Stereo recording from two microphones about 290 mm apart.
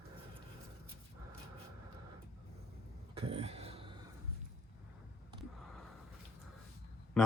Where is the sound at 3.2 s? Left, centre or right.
Centre.